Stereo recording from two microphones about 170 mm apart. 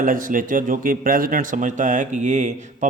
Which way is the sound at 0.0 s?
50° right (ahead or behind).